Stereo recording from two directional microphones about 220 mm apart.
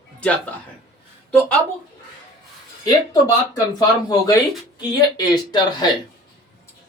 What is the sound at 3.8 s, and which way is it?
Speech, 20° left (ahead or behind).